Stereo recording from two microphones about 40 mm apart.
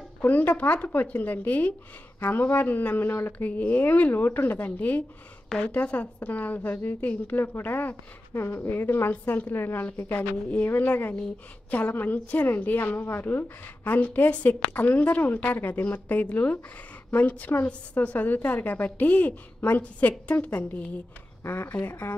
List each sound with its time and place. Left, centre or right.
0.2 s a woman's voice: left
0.6 s a woman's voice: left
2.1 s speech: left
3.1 s a woman's voice: left
3.3 s speech: left
4.2 s a woman's voice: left
8.4 s a woman's voice: left
9.1 s speech: left
10.7 s a woman's voice: left
13.9 s a woman's voice: left
21.5 s a woman's voice: left